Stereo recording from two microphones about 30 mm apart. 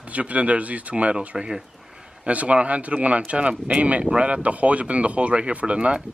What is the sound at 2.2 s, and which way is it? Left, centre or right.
Speech, right.